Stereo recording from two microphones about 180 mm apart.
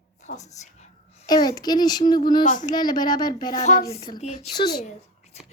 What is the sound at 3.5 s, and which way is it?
Speech, 40° left (ahead or behind).